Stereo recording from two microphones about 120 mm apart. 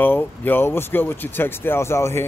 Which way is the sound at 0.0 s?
15° left (ahead or behind).